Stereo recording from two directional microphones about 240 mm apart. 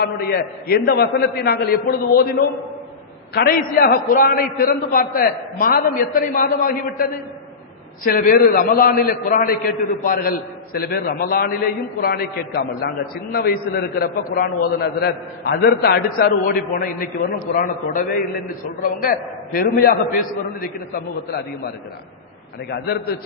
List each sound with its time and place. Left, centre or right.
0.0 s a man's voice: left
3.3 s a man's voice: left
22.7 s a man's voice: left